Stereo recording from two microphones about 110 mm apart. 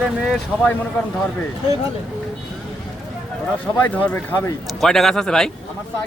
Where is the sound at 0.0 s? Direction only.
5° right (ahead or behind).